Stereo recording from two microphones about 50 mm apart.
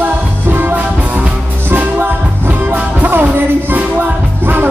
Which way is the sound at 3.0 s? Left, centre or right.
Right.